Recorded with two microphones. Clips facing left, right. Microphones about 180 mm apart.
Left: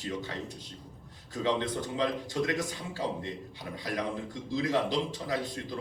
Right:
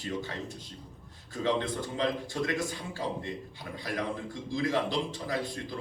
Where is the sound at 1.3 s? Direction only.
20° left (ahead or behind).